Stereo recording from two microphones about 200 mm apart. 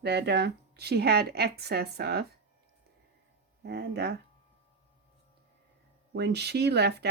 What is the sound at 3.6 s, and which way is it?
Speech, 55° right (ahead or behind).